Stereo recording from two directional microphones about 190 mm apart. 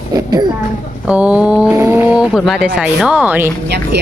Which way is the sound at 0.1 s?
20° right (ahead or behind).